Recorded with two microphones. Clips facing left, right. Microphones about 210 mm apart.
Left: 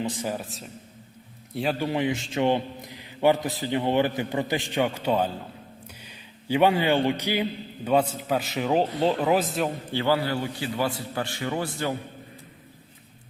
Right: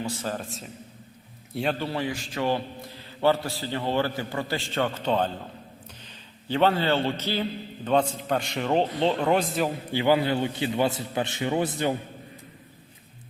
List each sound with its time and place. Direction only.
0.0 s a man's voice: 15° left (ahead or behind)
0.4 s a man's voice: centre (ahead or behind)
1.8 s a man's voice: 15° left (ahead or behind); by 9.7 s centre (ahead or behind)
9.9 s a man's voice: 15° right (ahead or behind)